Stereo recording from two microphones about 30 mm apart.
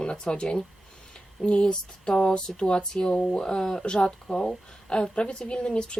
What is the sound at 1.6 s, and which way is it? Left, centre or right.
Speech, left.